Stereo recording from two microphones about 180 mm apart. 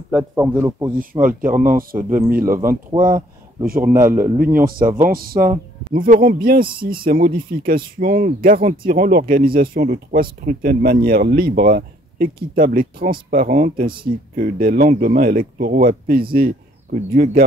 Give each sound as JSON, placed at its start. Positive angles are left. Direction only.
{"t": 0.1, "sound": "speech", "side_deg": -10}
{"t": 1.1, "sound": "speech", "side_deg": -25}
{"t": 1.6, "sound": "speech", "side_deg": -50}
{"t": 2.0, "sound": "speech", "side_deg": -15}
{"t": 4.6, "sound": "speech", "side_deg": -55}